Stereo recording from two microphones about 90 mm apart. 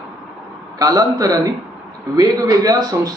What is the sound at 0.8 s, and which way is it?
Speech, 45° right (ahead or behind).